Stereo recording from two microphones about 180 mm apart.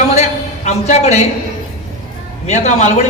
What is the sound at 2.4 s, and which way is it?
Speech, 40° left (ahead or behind).